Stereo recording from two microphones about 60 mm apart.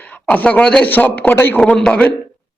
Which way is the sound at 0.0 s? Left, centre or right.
Left.